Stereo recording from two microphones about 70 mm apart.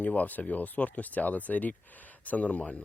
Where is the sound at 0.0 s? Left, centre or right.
Left.